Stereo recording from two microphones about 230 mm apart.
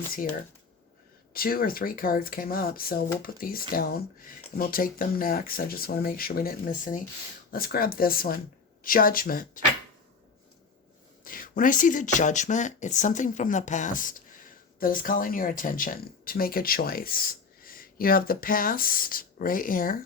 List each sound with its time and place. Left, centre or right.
1.3 s speech: left
11.2 s speech: left